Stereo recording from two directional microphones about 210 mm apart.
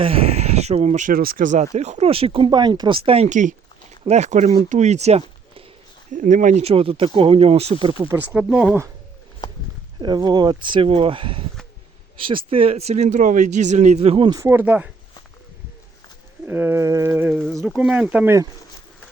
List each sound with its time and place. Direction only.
0.0 s speech: 30° right (ahead or behind)
8.1 s speech: 5° right (ahead or behind)
10.0 s speech: 20° right (ahead or behind)
16.5 s speech: 10° right (ahead or behind)